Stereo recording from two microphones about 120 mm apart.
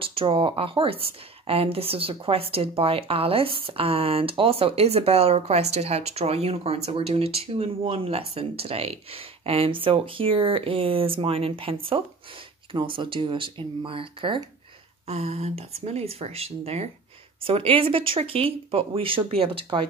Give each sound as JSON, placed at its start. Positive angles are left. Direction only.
{"t": 0.0, "sound": "speech", "side_deg": -50}
{"t": 15.0, "sound": "speech", "side_deg": -60}
{"t": 17.4, "sound": "speech", "side_deg": -50}